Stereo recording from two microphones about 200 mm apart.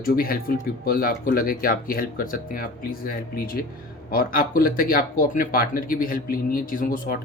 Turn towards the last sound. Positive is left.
turn(degrees=45)  # may be behind; listen again after turning